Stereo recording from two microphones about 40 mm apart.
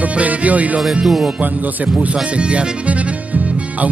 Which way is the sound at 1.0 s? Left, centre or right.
Centre.